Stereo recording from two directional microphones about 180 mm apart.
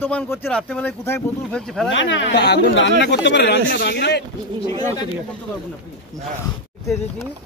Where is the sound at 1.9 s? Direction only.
90° left; by 4.2 s 70° left (ahead or behind).